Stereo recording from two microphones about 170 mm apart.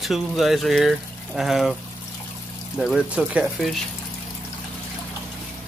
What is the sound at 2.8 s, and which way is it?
Speech, 5° right (ahead or behind).